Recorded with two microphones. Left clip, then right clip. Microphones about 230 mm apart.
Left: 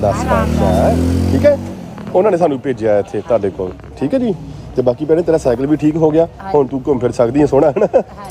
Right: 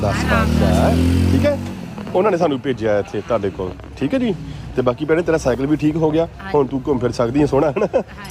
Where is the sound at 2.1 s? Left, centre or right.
Centre.